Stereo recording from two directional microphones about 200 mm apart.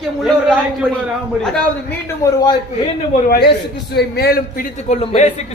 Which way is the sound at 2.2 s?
15° left (ahead or behind).